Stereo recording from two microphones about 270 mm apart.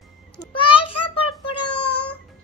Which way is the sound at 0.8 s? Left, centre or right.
Left.